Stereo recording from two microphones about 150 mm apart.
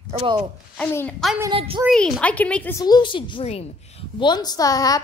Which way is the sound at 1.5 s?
40° right (ahead or behind).